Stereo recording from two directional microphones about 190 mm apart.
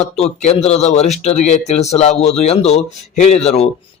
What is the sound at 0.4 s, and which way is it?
Speech, 35° left (ahead or behind).